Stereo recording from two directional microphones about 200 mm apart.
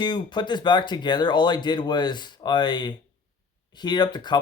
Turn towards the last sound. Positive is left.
turn(degrees=20)  # may be behind; listen again after turning